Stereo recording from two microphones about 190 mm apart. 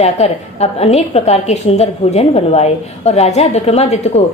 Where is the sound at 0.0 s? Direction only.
35° left (ahead or behind).